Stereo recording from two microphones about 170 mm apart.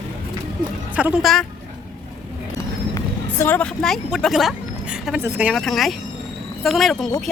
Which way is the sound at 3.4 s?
10° left (ahead or behind).